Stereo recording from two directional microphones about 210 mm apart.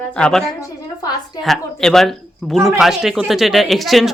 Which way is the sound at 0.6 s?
15° left (ahead or behind).